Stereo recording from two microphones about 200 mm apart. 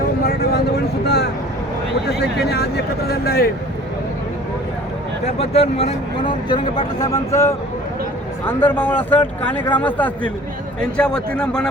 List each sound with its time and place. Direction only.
1.0 s vehicle: 55° left (ahead or behind)
2.0 s speech: 55° left (ahead or behind)
5.2 s speech: 30° left (ahead or behind)
7.0 s a man's voice: 15° left (ahead or behind)